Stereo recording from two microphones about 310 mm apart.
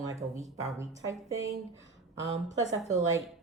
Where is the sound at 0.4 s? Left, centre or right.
Centre.